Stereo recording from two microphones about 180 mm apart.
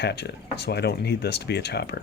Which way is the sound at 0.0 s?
65° left (ahead or behind).